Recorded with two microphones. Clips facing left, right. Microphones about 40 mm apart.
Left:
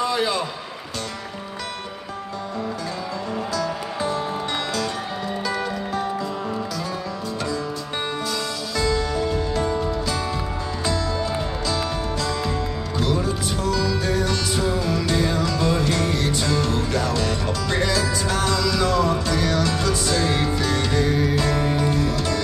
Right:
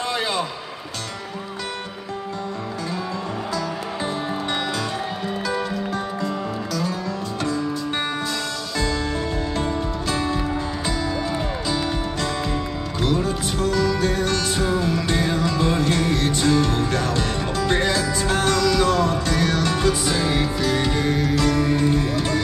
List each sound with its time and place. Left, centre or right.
9.6 s music: right
10.9 s music: centre
13.6 s music: right
14.9 s music: right
19.9 s music: centre
20.8 s music: right